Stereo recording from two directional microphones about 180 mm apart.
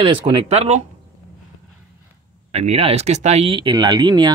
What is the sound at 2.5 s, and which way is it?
Speech, 35° right (ahead or behind).